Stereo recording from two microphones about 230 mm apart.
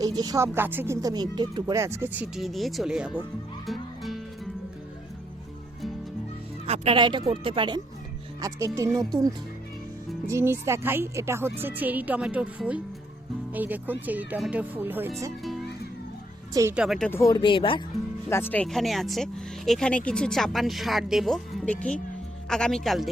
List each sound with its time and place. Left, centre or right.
0.0 s speech: centre
3.7 s music: centre
6.7 s speech: right; by 15.1 s centre
16.6 s speech: centre
17.1 s speech: centre
18.3 s speech: centre